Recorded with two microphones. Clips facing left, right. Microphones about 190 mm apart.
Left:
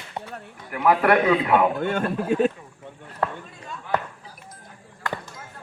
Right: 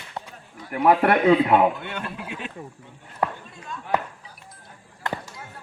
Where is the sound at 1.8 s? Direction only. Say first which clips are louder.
Left 9 dB; 45° left (ahead or behind).